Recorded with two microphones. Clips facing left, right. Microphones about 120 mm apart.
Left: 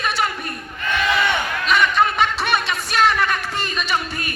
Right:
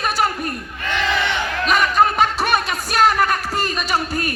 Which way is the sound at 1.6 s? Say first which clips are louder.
Right 2 dB; 40° right (ahead or behind).